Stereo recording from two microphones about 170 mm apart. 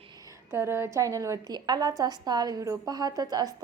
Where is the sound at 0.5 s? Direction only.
15° right (ahead or behind).